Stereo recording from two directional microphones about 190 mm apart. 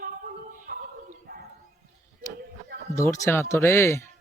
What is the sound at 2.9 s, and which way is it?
A man's voice, 15° left (ahead or behind).